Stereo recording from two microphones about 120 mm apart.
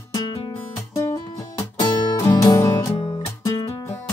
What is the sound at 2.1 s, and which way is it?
Music, 30° left (ahead or behind).